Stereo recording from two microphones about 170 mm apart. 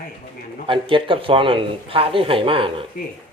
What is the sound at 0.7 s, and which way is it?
Speech, 30° right (ahead or behind).